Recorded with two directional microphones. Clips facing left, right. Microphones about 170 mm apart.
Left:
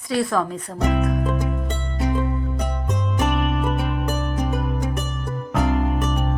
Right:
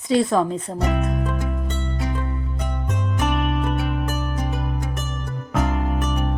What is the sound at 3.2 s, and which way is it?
Music, centre (ahead or behind).